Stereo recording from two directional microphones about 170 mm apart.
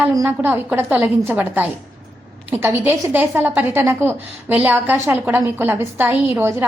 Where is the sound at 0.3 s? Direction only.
10° right (ahead or behind).